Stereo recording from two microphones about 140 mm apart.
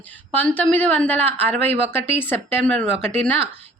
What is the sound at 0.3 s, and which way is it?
A woman's voice, 10° left (ahead or behind).